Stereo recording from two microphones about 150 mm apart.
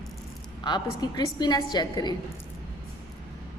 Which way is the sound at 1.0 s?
25° left (ahead or behind).